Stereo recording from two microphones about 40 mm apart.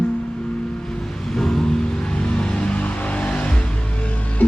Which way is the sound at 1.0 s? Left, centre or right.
Centre.